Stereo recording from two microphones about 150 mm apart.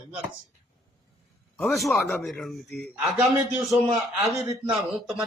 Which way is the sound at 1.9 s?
15° left (ahead or behind).